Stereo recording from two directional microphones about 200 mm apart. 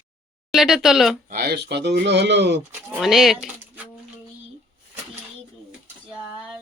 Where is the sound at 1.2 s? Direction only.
50° right (ahead or behind).